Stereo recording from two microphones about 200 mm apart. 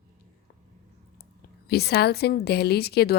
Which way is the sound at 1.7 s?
55° left (ahead or behind).